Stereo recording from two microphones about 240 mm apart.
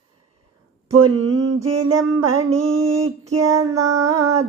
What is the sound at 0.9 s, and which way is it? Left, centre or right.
Speech, right.